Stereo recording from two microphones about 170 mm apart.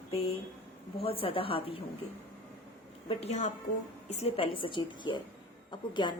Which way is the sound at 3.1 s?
35° left (ahead or behind).